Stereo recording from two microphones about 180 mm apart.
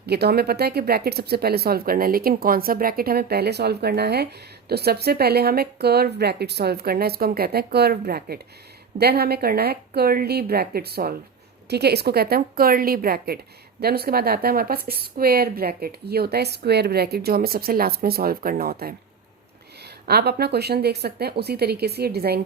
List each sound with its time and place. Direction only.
0.0 s speech: 65° right (ahead or behind)